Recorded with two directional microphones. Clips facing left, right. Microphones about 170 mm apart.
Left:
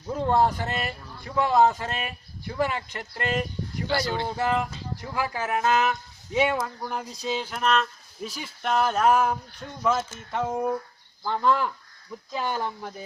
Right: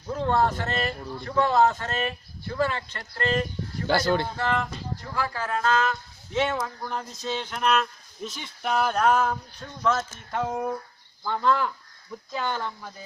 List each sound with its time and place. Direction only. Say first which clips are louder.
0.1 s speech: left 1 dB; 10° left (ahead or behind)
3.8 s speech: right 4 dB; 50° right (ahead or behind)
4.2 s speech: left 2 dB; 10° left (ahead or behind)
11.2 s speech: even; 10° left (ahead or behind)